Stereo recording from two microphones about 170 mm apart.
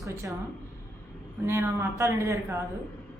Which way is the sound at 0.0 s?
20° right (ahead or behind).